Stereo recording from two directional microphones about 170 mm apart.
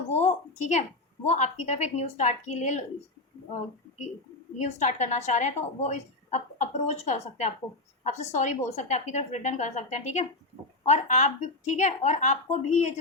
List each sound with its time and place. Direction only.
0.1 s a woman's voice: 40° left (ahead or behind)
4.5 s a woman's voice: 40° left (ahead or behind)